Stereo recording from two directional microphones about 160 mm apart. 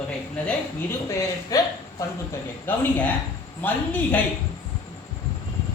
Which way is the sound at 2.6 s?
10° left (ahead or behind).